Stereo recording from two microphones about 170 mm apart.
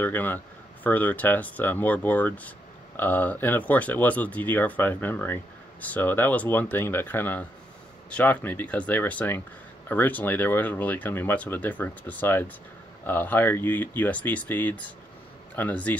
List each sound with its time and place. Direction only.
0.0 s speech: 10° left (ahead or behind)